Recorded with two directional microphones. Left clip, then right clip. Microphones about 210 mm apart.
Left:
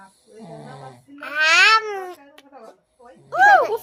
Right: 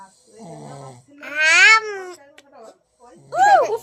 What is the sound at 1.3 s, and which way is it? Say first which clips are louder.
Speech: right 2 dB; 15° right (ahead or behind).